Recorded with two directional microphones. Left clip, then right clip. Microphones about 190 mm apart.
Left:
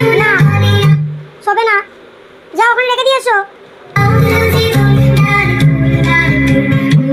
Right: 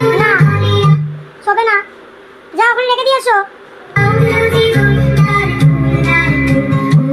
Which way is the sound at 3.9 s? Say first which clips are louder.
Even; 35° left (ahead or behind).